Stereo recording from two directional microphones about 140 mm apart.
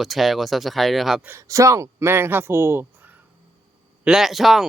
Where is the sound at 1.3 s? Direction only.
20° right (ahead or behind).